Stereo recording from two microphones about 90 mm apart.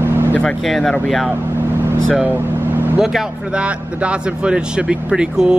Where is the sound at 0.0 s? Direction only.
25° right (ahead or behind).